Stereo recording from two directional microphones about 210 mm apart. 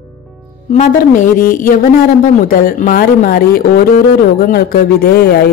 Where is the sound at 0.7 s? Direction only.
35° left (ahead or behind).